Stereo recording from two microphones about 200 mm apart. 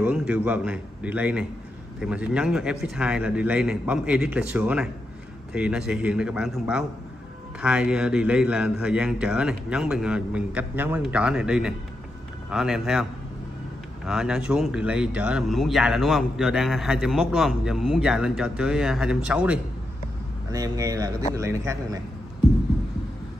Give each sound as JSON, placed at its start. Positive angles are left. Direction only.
{"t": 0.0, "sound": "a man's voice", "side_deg": -5}
{"t": 14.0, "sound": "speech", "side_deg": -5}
{"t": 20.5, "sound": "a man's voice", "side_deg": -20}